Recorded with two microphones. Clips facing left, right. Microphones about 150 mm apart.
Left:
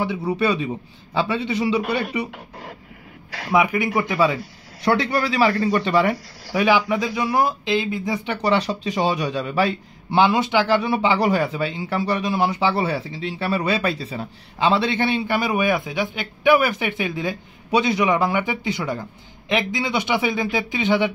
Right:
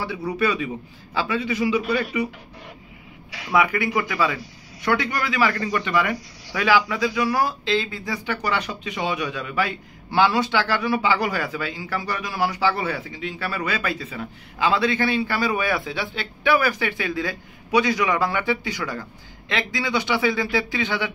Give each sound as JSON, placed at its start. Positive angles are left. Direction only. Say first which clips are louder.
{"t": 0.0, "sound": "speech", "louder": "left 2 dB", "side_deg": 25}
{"t": 3.5, "sound": "speech", "louder": "left 2 dB", "side_deg": 20}